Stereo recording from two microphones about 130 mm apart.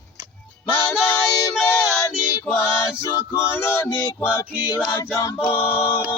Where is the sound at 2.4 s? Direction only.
20° left (ahead or behind).